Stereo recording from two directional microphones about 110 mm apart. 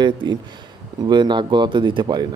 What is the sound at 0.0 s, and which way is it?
A man's voice, 45° right (ahead or behind).